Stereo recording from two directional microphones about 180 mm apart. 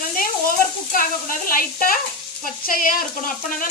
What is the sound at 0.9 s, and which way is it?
Sizzle, 50° left (ahead or behind).